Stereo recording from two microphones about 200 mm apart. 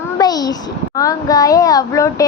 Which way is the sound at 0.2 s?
20° left (ahead or behind).